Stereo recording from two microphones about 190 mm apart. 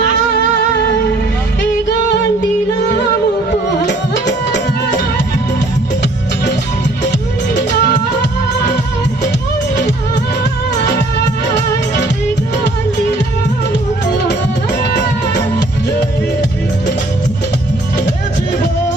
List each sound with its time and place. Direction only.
3.8 s music: 65° left (ahead or behind)
11.4 s music: 65° left (ahead or behind)
14.8 s music: 60° left (ahead or behind)